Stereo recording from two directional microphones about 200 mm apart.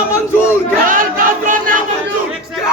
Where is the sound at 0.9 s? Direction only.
45° right (ahead or behind).